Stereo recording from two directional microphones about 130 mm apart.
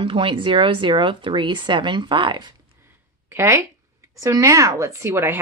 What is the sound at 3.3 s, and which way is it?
Speech, 20° right (ahead or behind).